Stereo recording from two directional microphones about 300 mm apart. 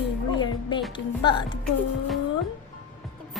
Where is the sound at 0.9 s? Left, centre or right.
Centre.